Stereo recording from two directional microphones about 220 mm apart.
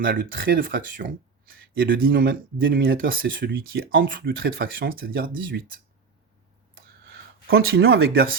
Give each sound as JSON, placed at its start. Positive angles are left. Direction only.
{"t": 0.0, "sound": "speech", "side_deg": -40}
{"t": 7.7, "sound": "speech", "side_deg": -45}